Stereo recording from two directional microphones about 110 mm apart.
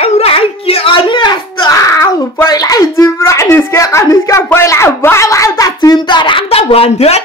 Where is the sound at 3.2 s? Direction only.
25° left (ahead or behind); by 6.4 s 45° left (ahead or behind).